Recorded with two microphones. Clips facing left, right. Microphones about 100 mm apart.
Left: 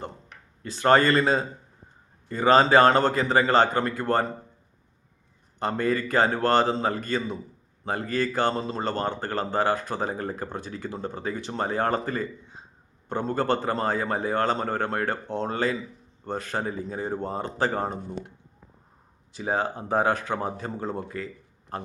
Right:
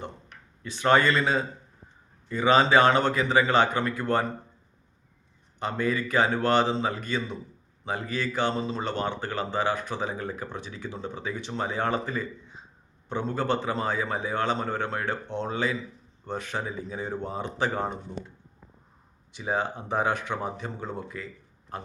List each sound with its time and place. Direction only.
0.0 s a man's voice: 40° left (ahead or behind)
5.5 s speech: 45° left (ahead or behind)
19.4 s speech: 40° left (ahead or behind)